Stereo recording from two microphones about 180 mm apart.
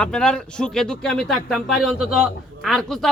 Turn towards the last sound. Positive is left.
turn(degrees=0)  # may be behind; listen again after turning